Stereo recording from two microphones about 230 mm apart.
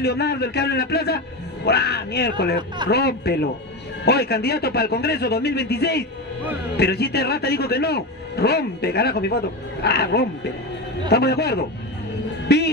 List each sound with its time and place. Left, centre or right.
0.0 s a man's voice: left